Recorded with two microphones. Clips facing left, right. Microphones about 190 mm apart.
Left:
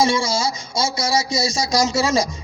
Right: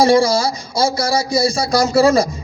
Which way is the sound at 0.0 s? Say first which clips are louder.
Right 6 dB; 60° right (ahead or behind).